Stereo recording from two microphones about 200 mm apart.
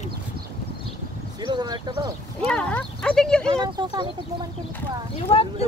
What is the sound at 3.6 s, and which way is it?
Speech, 20° right (ahead or behind).